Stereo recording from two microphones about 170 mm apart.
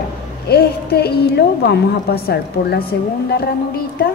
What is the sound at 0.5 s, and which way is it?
A woman's voice, 70° left (ahead or behind).